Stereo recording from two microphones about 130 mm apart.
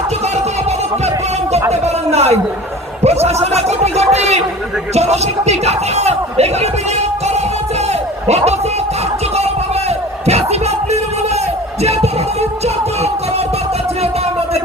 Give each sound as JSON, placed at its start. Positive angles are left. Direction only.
{"t": 1.7, "sound": "a man's voice", "side_deg": -55}
{"t": 8.3, "sound": "speech", "side_deg": -55}
{"t": 10.2, "sound": "music", "side_deg": -55}